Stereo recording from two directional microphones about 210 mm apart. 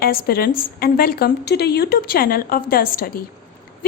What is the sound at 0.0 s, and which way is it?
A woman's voice, 45° left (ahead or behind).